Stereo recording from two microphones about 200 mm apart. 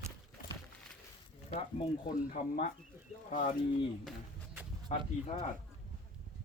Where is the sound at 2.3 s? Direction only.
45° left (ahead or behind).